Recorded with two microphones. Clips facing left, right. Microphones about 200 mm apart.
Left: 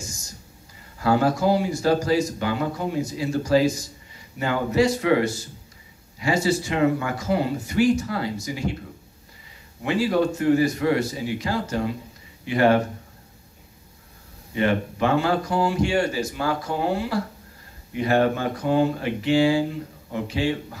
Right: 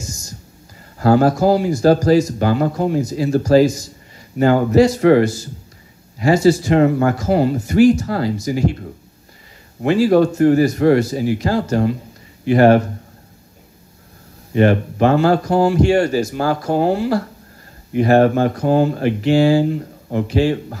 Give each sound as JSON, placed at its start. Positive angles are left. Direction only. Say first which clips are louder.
{"t": 0.9, "sound": "speech", "louder": "right 7 dB", "side_deg": -40}
{"t": 9.8, "sound": "speech", "louder": "right 8 dB", "side_deg": -45}
{"t": 12.4, "sound": "speech", "louder": "right 7 dB", "side_deg": -40}
{"t": 14.6, "sound": "speech", "louder": "right 8 dB", "side_deg": -45}